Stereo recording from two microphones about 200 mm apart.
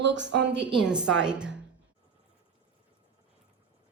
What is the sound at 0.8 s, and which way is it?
Speech, 5° right (ahead or behind).